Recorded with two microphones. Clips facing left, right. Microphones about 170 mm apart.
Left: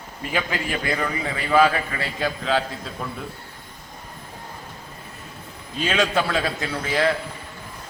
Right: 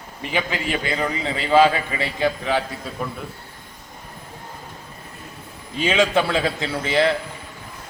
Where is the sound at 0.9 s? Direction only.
20° right (ahead or behind).